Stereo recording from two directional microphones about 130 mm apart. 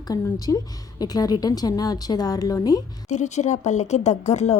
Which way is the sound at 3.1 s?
65° left (ahead or behind).